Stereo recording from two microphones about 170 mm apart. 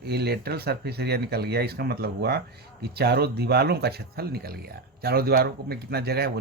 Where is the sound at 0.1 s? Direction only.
70° right (ahead or behind).